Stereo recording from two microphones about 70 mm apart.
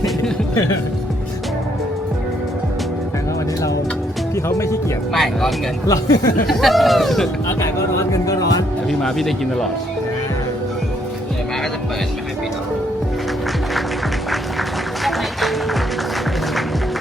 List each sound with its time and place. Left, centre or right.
4.4 s speech: left
5.1 s a man's voice: centre
5.9 s speech: left
6.5 s a man's voice: centre
7.4 s speech: left
8.9 s a man's voice: centre
15.0 s music: centre